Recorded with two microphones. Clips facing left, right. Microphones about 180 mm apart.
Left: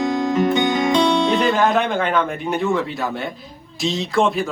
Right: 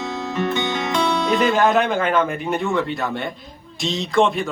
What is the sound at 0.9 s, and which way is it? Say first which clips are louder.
Music: left 3 dB; 25° left (ahead or behind).